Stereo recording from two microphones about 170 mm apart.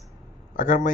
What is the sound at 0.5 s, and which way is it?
Speech, 50° left (ahead or behind).